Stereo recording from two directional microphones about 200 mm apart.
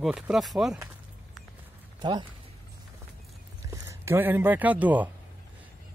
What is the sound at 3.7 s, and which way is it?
Speech, 10° right (ahead or behind).